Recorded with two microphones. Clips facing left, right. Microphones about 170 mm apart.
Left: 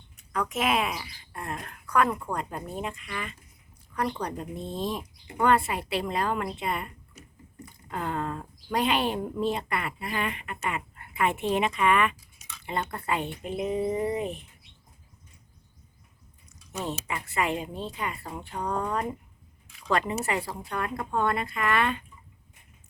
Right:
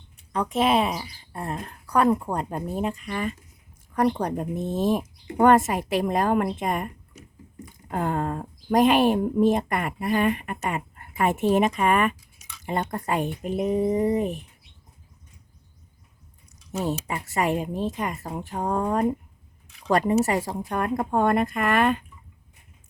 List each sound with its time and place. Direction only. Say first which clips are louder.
0.3 s speech: right 5 dB; 30° right (ahead or behind)
17.1 s speech: right 4 dB; 40° right (ahead or behind)